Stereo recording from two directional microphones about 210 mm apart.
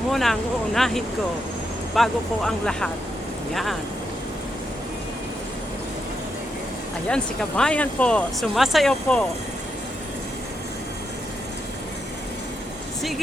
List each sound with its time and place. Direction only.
0.1 s speech: centre (ahead or behind)
7.1 s speech: 5° left (ahead or behind)
13.0 s speech: centre (ahead or behind)